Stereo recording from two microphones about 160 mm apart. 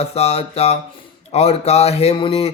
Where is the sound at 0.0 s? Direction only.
40° left (ahead or behind).